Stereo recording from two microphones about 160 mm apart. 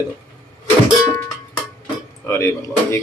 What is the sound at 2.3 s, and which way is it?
Speech, 15° left (ahead or behind).